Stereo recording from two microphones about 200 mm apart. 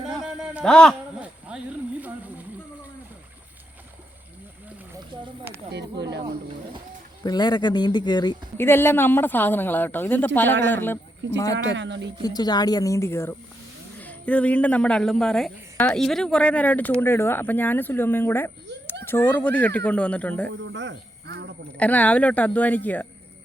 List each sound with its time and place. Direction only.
0.0 s a sound: 5° right (ahead or behind)
5.1 s a sound: 25° right (ahead or behind)
5.7 s speech: 60° right (ahead or behind)
7.3 s a woman's voice: 20° left (ahead or behind)
11.5 s speech: 65° right (ahead or behind)
12.2 s a woman's voice: 20° left (ahead or behind)
20.5 s speech: 65° right (ahead or behind)
21.8 s a woman's voice: 5° left (ahead or behind)